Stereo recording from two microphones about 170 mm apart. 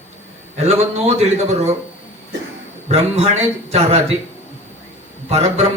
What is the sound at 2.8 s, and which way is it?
Speech, 35° right (ahead or behind).